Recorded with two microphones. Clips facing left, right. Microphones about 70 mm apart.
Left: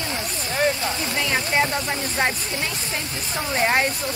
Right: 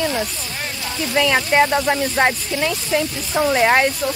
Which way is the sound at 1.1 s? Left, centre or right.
Right.